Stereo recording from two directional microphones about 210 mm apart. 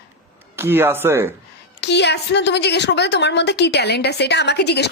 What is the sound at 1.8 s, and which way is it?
A woman's voice, 55° left (ahead or behind).